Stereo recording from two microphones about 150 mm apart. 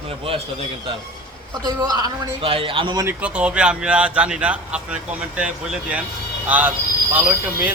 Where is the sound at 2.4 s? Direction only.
40° right (ahead or behind).